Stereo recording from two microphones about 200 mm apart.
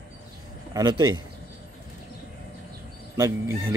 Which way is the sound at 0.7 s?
20° right (ahead or behind).